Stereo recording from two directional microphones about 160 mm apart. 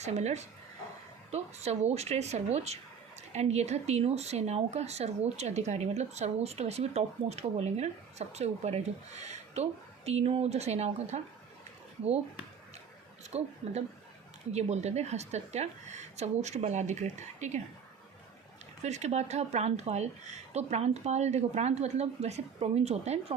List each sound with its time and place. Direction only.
0.0 s speech: 45° right (ahead or behind)
13.3 s a woman's voice: 40° right (ahead or behind)
14.5 s speech: 45° right (ahead or behind)
18.8 s speech: 45° right (ahead or behind)